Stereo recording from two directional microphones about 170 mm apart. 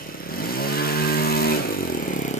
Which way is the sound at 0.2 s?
60° left (ahead or behind).